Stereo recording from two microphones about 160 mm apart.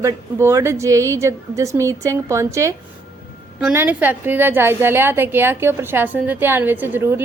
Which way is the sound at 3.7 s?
10° right (ahead or behind).